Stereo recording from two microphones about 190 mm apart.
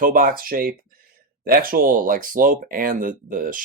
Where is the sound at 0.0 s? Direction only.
50° right (ahead or behind).